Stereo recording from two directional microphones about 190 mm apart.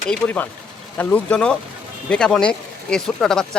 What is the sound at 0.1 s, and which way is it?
Speech, 10° left (ahead or behind).